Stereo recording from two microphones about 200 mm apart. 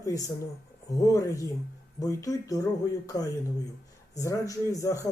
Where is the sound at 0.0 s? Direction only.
15° left (ahead or behind).